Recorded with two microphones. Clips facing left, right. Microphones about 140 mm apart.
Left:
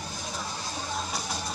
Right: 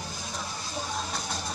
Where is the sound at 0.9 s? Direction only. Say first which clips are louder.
Even; 5° left (ahead or behind).